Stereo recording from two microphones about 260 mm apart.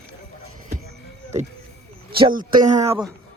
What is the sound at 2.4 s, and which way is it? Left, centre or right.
Speech, right.